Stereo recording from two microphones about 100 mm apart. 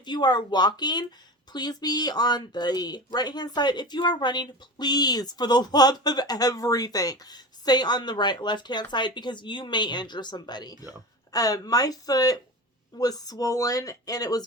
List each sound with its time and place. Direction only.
0.0 s speech: 45° left (ahead or behind)